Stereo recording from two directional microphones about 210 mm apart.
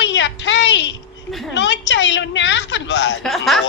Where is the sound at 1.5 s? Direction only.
55° left (ahead or behind).